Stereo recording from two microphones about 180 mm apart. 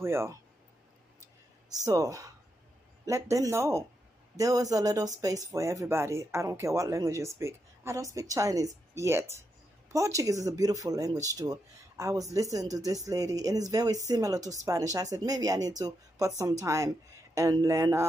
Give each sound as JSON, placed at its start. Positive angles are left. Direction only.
{"t": 0.0, "sound": "speech", "side_deg": -15}
{"t": 1.9, "sound": "speech", "side_deg": -20}